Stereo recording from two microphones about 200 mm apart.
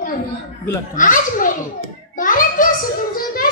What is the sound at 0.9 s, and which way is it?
Speech, 40° left (ahead or behind).